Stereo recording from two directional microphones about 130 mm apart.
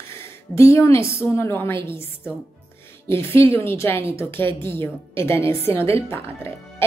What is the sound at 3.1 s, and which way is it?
A woman's voice, 20° left (ahead or behind).